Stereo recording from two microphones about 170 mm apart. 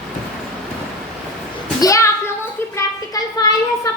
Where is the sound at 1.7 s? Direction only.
20° left (ahead or behind).